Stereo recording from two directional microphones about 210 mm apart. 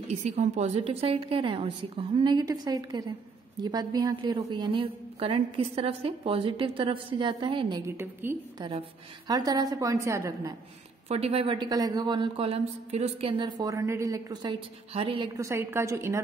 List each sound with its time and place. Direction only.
0.1 s a woman's voice: 30° right (ahead or behind); by 10.5 s 15° right (ahead or behind)
11.1 s a woman's voice: 30° right (ahead or behind)
15.3 s a woman's voice: 15° right (ahead or behind)